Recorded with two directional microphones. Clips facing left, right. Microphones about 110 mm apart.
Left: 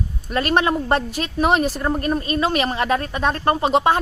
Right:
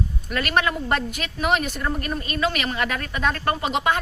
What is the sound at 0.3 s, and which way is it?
A woman's voice, 30° left (ahead or behind).